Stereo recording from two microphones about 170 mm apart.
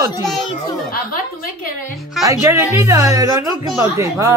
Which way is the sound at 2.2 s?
15° right (ahead or behind).